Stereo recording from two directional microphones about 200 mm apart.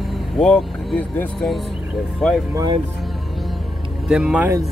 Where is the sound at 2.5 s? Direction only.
20° right (ahead or behind).